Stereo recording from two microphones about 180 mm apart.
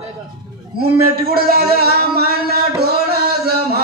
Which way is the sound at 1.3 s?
60° right (ahead or behind).